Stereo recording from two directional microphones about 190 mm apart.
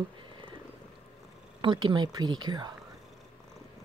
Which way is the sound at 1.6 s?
25° right (ahead or behind).